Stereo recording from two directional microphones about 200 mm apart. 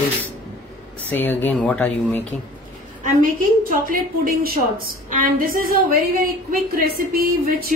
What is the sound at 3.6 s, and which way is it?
A woman's voice, 45° right (ahead or behind).